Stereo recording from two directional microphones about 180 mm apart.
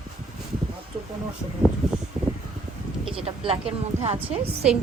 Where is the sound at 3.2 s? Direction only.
30° right (ahead or behind).